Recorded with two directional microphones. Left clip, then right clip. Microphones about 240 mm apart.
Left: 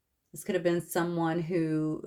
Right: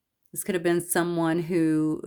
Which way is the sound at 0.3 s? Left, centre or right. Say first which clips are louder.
Right 3 dB; right.